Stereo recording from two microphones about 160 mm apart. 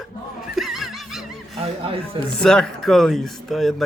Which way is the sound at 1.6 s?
35° right (ahead or behind).